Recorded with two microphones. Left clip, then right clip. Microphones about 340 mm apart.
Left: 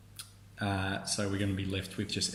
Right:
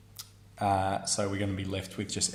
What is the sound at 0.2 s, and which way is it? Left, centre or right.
Speech, centre.